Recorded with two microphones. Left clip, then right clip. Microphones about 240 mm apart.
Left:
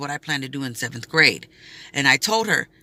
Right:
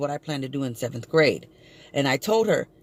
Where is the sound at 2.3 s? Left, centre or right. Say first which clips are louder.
Left 1 dB; centre.